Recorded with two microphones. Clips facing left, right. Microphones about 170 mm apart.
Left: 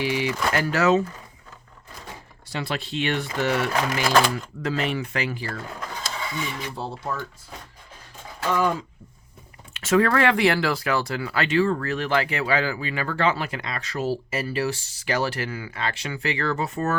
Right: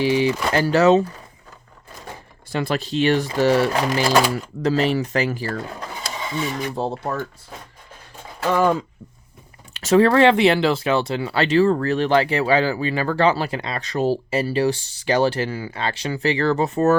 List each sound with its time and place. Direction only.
0.0 s speech: 30° right (ahead or behind)
2.5 s speech: 45° right (ahead or behind)
6.1 s a sound: 25° right (ahead or behind)
6.4 s filing: 45° right (ahead or behind)
6.8 s speech: 60° right (ahead or behind)
9.7 s speech: 35° right (ahead or behind)